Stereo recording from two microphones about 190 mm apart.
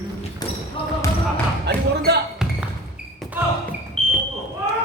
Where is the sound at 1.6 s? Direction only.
60° right (ahead or behind).